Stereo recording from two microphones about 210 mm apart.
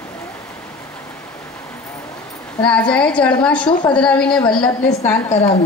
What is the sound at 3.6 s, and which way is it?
Speech, 25° left (ahead or behind).